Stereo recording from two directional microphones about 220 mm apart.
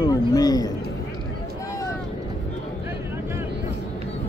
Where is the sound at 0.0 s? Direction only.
15° left (ahead or behind).